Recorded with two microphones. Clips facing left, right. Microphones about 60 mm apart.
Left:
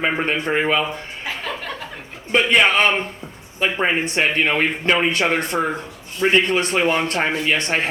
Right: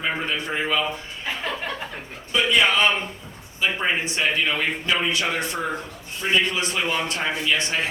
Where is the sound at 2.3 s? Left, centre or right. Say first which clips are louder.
Left 4 dB; left.